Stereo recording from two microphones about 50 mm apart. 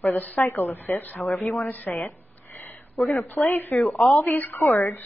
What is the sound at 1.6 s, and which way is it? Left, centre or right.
Speech, left.